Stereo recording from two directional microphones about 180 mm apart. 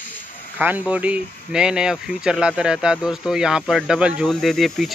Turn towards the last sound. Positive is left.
turn(degrees=0)  # may be behind; listen again after turning